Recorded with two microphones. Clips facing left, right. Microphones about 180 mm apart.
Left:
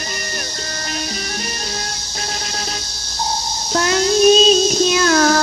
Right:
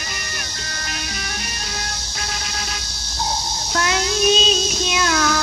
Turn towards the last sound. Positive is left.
turn(degrees=40)  # may be behind; listen again after turning